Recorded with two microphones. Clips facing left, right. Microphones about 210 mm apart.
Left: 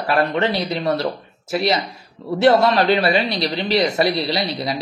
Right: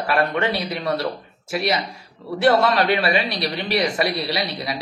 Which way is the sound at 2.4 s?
25° left (ahead or behind).